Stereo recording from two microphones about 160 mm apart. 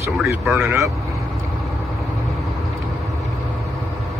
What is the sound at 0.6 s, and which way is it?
Speech, 15° right (ahead or behind).